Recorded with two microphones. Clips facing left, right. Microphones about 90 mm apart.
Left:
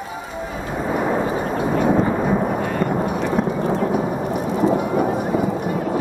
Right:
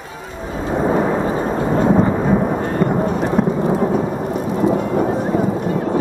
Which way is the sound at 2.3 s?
15° right (ahead or behind).